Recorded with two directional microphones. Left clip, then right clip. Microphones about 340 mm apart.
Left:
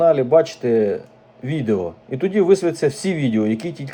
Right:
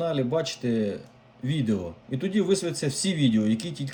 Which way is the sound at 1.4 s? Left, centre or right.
Left.